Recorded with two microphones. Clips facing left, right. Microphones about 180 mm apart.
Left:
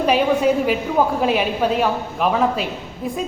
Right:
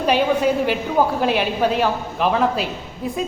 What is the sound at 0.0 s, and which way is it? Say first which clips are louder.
A woman's voice: left 1 dB; centre (ahead or behind).